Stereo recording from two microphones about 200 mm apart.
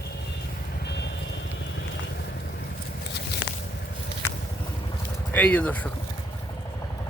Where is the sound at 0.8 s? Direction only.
60° left (ahead or behind).